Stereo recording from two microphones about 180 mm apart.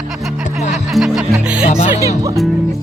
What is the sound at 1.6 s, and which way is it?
Speech, 35° left (ahead or behind).